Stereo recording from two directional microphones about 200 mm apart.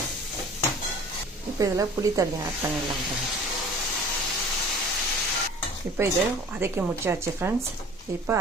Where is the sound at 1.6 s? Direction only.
15° right (ahead or behind).